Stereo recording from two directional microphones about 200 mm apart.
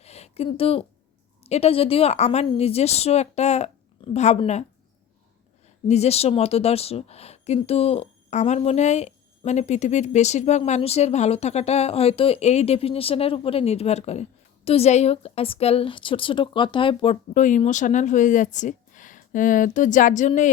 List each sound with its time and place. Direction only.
0.0 s a sound: 30° left (ahead or behind)
1.5 s speech: 30° left (ahead or behind)
5.9 s speech: 30° left (ahead or behind)